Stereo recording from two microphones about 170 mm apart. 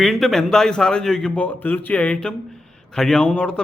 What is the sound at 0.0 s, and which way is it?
A man's voice, centre (ahead or behind).